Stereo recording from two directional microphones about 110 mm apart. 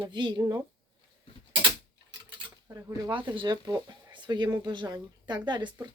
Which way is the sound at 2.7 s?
30° right (ahead or behind).